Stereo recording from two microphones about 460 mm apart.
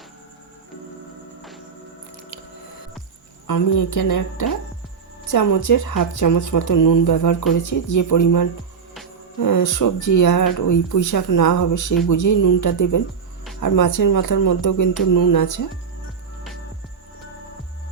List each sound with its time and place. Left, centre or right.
1.4 s music: centre
3.4 s speech: left